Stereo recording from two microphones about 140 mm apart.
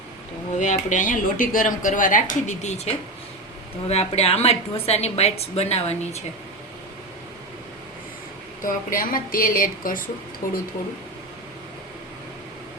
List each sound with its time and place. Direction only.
0.5 s a woman's voice: 60° left (ahead or behind)
8.6 s a woman's voice: 80° left